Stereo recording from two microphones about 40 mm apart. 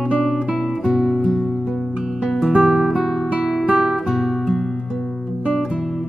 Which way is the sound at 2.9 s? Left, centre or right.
Centre.